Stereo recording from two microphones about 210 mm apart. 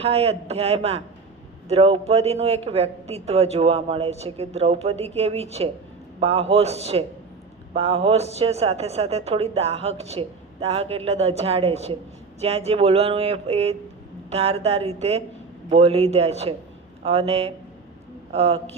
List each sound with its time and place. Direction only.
0.0 s a woman's voice: 30° right (ahead or behind)